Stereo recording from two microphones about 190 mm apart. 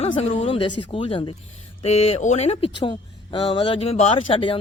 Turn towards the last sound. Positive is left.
turn(degrees=30)  # may be behind; listen again after turning